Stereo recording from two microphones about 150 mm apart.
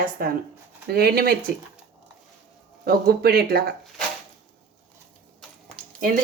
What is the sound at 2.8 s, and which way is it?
Speech, 90° right.